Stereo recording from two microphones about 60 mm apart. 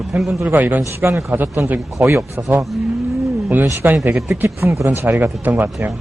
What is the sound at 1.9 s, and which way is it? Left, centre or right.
Speech, right.